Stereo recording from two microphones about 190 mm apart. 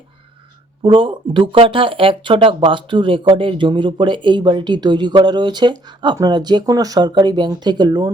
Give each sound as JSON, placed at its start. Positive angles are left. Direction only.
{"t": 0.8, "sound": "speech", "side_deg": -25}